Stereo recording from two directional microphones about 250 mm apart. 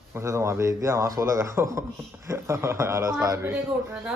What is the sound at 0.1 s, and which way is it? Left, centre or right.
A man's voice, centre.